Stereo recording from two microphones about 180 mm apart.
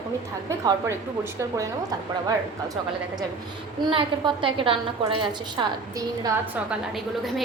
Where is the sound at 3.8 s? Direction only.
25° right (ahead or behind).